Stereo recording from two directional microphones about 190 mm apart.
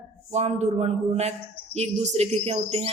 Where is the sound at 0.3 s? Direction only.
35° right (ahead or behind).